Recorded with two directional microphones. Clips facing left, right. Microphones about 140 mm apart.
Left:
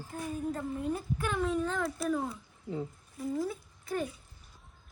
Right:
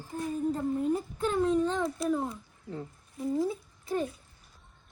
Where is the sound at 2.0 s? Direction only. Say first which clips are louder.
Right 2 dB; centre (ahead or behind).